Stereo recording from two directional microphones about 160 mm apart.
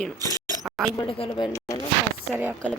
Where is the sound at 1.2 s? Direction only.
30° left (ahead or behind).